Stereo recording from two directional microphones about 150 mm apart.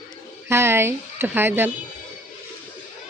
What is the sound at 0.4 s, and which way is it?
Speech, 15° right (ahead or behind).